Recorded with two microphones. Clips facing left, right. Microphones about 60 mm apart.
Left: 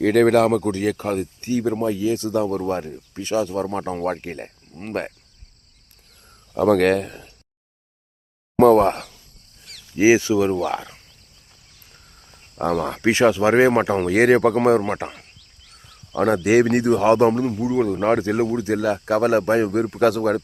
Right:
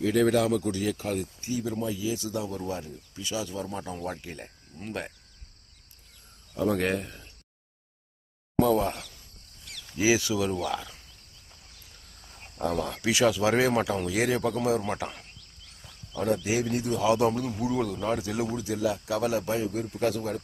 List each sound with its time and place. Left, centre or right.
0.0 s speech: left
6.6 s speech: left
8.5 s speech: left
10.0 s speech: left
12.5 s speech: left
13.9 s speech: left
14.8 s speech: left
16.1 s speech: left
17.9 s speech: left
18.8 s speech: left